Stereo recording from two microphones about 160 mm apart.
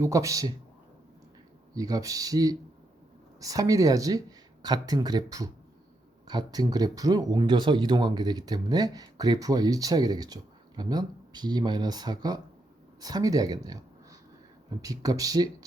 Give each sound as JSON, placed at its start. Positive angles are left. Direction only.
{"t": 0.0, "sound": "speech", "side_deg": -20}
{"t": 1.7, "sound": "speech", "side_deg": -20}